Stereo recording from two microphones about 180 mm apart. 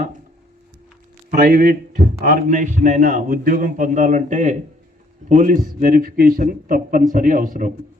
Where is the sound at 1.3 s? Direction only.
55° right (ahead or behind).